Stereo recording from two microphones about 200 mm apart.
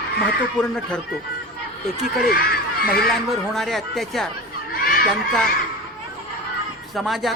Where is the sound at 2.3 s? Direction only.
50° left (ahead or behind).